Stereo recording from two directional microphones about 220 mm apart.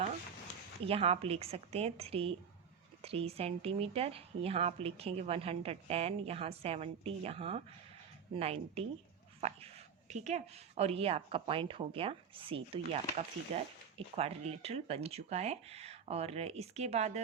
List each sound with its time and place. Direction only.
0.9 s speech: 25° right (ahead or behind)